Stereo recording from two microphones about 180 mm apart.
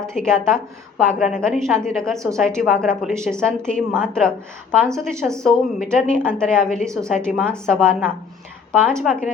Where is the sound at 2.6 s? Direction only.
5° left (ahead or behind).